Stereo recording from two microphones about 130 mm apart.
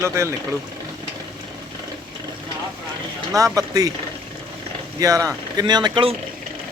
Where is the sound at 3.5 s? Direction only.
30° right (ahead or behind).